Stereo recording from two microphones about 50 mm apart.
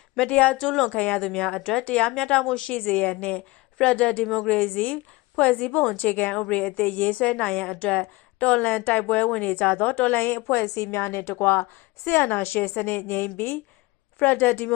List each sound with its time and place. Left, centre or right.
0.3 s a woman's voice: left
0.6 s speech: centre
0.9 s a woman's voice: left
1.2 s speech: centre
2.7 s speech: left
4.2 s speech: centre
4.5 s a woman's voice: left
10.5 s a woman's voice: left
12.0 s a woman's voice: left